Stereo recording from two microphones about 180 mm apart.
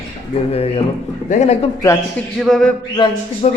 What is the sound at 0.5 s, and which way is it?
A man's voice, 35° left (ahead or behind).